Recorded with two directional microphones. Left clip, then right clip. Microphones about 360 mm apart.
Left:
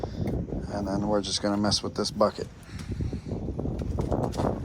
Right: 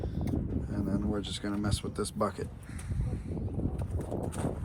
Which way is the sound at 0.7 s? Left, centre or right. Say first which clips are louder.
Left 8 dB; centre.